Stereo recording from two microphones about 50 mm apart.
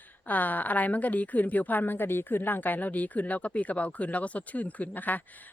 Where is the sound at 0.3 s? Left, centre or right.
Left.